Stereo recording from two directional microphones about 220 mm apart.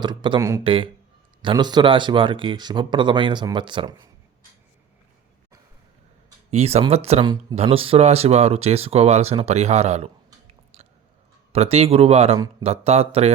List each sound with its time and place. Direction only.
0.0 s speech: 20° right (ahead or behind)
6.5 s speech: 30° right (ahead or behind)
11.5 s speech: 30° right (ahead or behind)